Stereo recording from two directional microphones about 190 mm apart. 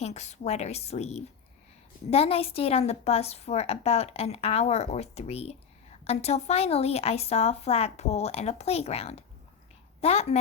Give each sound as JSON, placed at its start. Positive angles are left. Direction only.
{"t": 0.0, "sound": "a woman's voice", "side_deg": 35}